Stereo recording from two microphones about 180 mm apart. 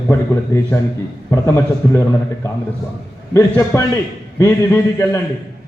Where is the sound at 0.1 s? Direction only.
15° left (ahead or behind).